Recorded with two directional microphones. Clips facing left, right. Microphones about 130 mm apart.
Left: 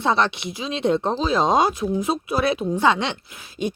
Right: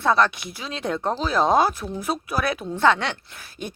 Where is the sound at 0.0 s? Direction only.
25° left (ahead or behind).